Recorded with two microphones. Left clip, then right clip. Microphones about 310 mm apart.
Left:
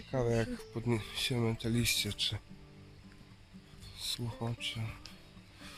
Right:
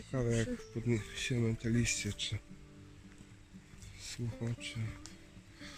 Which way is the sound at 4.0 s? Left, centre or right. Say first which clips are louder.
Left 6 dB; centre.